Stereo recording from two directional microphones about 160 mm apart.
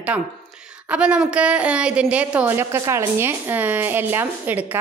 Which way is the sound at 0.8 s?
5° right (ahead or behind).